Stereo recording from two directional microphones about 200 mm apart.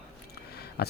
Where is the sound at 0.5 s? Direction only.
55° left (ahead or behind).